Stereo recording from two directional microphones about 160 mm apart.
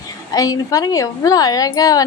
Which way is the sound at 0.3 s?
20° left (ahead or behind).